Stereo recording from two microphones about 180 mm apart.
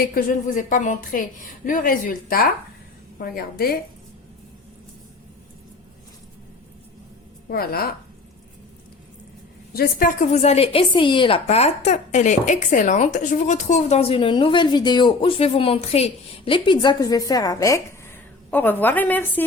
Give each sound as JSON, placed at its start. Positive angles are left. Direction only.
{"t": 0.0, "sound": "a woman's voice", "side_deg": 50}
{"t": 7.5, "sound": "a woman's voice", "side_deg": 60}
{"t": 9.7, "sound": "a woman's voice", "side_deg": 55}